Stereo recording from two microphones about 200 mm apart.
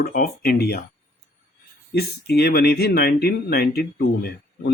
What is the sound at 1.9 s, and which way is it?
Speech, 50° left (ahead or behind).